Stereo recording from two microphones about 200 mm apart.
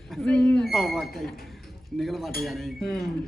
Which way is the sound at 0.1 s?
5° left (ahead or behind).